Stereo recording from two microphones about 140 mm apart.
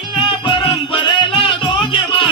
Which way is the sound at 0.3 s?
35° left (ahead or behind).